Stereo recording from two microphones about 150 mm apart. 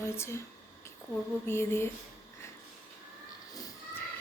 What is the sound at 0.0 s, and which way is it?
Speech, 15° left (ahead or behind).